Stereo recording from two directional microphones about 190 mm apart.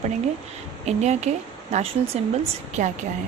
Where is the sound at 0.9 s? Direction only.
35° right (ahead or behind).